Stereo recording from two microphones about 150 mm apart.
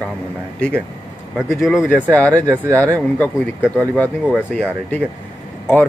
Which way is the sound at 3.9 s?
10° left (ahead or behind).